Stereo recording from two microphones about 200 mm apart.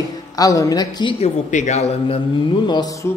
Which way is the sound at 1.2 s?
35° left (ahead or behind).